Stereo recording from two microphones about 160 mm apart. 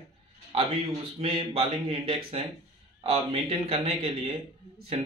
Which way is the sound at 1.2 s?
35° right (ahead or behind).